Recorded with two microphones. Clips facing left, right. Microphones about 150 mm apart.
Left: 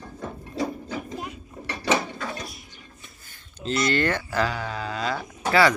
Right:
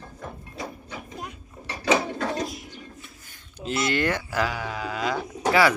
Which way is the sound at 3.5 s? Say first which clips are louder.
Left 2 dB; 10° right (ahead or behind).